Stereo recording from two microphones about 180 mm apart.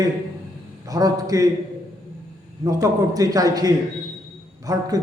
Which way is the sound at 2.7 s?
20° right (ahead or behind).